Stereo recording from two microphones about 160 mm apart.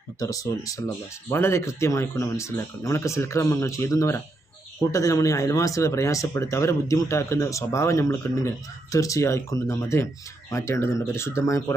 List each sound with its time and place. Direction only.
0.2 s speech: 20° left (ahead or behind)